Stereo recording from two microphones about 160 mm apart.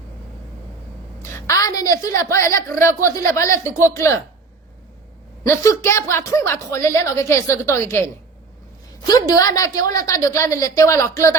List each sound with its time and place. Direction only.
1.2 s a woman's voice: 20° left (ahead or behind)
5.5 s a woman's voice: 15° left (ahead or behind)